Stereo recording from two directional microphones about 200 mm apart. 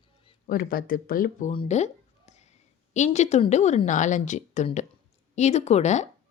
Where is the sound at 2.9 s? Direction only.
35° left (ahead or behind).